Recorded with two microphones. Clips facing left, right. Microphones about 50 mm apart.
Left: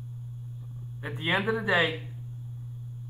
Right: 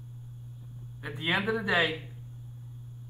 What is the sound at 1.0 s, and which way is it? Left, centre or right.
Speech, centre.